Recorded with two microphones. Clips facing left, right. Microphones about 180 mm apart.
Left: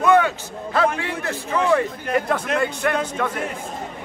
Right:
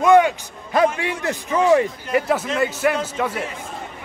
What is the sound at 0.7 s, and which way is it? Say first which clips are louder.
A man's voice: right 3 dB; 15° right (ahead or behind).